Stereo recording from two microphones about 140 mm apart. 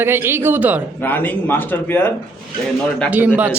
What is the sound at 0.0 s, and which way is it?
Speech, 15° right (ahead or behind).